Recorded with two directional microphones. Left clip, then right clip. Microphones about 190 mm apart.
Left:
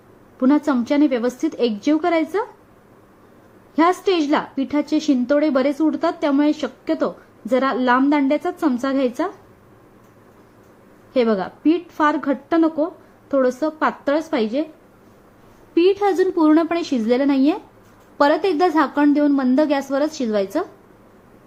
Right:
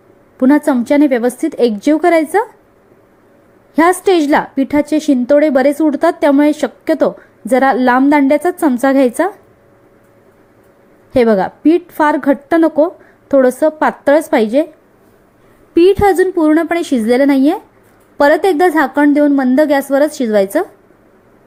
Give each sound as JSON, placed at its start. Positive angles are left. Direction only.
{"t": 0.3, "sound": "a woman's voice", "side_deg": -30}
{"t": 4.0, "sound": "a woman's voice", "side_deg": -30}
{"t": 11.1, "sound": "a woman's voice", "side_deg": -30}
{"t": 15.7, "sound": "a woman's voice", "side_deg": -35}